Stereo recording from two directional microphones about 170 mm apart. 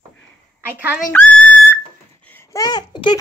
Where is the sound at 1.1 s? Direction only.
5° left (ahead or behind).